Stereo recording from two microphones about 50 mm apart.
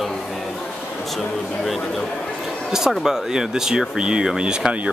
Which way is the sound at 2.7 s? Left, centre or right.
Centre.